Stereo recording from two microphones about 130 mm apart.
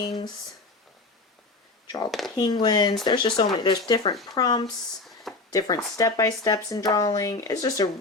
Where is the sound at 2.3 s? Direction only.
35° left (ahead or behind).